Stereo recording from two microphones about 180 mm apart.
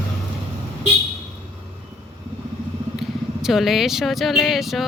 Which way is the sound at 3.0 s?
Centre (ahead or behind).